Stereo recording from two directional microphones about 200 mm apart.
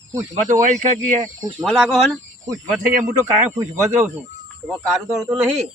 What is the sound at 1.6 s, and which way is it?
Speech, centre (ahead or behind).